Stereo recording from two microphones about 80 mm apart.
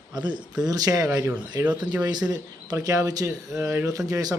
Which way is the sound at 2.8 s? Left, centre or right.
Right.